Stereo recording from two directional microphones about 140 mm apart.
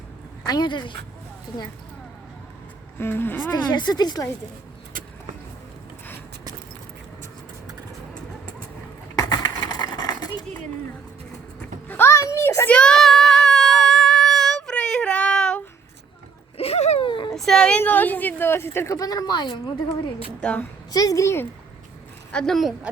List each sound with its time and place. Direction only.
0.4 s speech: 30° left (ahead or behind)
3.0 s speech: 15° left (ahead or behind)
3.5 s a woman's voice: 30° left (ahead or behind)
9.1 s a sound: 25° left (ahead or behind)
11.9 s a sound: 15° left (ahead or behind)
12.7 s child singing: 5° left (ahead or behind)
16.6 s a sound: 45° left (ahead or behind)
17.1 s a sound: 35° left (ahead or behind)
17.3 s speech: 5° left (ahead or behind); by 20.0 s 35° left (ahead or behind)
20.4 s speech: 10° left (ahead or behind)
20.9 s a woman's voice: 25° left (ahead or behind)
22.3 s speech: 5° left (ahead or behind)